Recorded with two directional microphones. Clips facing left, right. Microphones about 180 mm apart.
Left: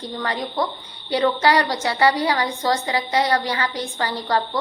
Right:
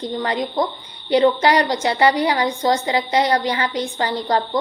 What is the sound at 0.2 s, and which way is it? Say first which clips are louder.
A woman's voice: right 2 dB; 20° right (ahead or behind).